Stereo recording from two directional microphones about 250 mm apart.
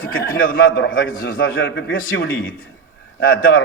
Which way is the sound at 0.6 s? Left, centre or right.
Left.